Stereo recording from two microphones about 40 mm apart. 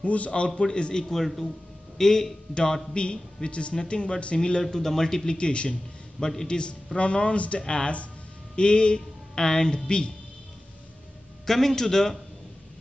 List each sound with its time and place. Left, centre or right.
0.0 s speech: left
0.6 s speech: left
1.1 s a man's voice: centre; by 10.1 s left
11.4 s a man's voice: centre